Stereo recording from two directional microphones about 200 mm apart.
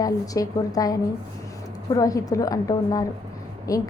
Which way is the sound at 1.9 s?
15° left (ahead or behind).